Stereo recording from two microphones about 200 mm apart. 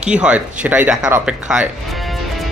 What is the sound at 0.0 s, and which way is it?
Speech, 5° right (ahead or behind).